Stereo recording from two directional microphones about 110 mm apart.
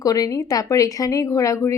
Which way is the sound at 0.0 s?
30° left (ahead or behind).